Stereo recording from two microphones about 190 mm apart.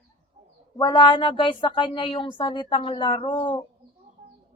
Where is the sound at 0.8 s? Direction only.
25° left (ahead or behind).